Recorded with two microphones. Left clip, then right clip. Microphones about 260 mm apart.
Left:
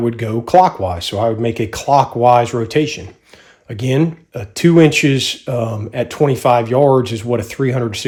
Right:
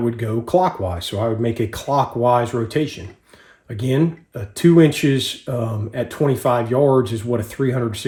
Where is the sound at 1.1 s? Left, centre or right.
Left.